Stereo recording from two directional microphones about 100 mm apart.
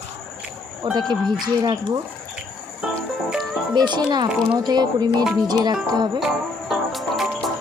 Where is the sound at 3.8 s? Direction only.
45° right (ahead or behind).